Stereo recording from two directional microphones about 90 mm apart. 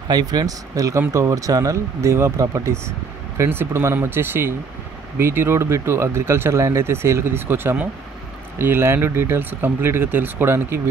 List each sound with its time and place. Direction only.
0.1 s speech: 50° right (ahead or behind); by 10.8 s 25° right (ahead or behind)